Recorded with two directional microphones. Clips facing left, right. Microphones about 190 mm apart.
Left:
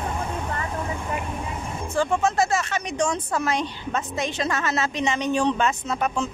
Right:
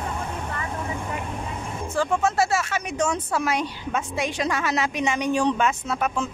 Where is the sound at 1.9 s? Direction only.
5° right (ahead or behind).